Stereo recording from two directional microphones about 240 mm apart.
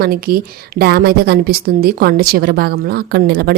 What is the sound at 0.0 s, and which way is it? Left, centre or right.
A woman's voice, right.